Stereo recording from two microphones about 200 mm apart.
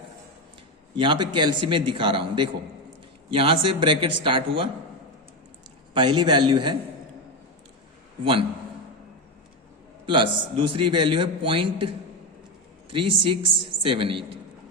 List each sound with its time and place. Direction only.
0.9 s a man's voice: 25° right (ahead or behind)
5.9 s a man's voice: 20° right (ahead or behind)
10.1 s a man's voice: 25° right (ahead or behind)